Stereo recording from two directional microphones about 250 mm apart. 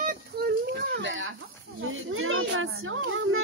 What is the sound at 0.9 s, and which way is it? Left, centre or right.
A child's voice, right.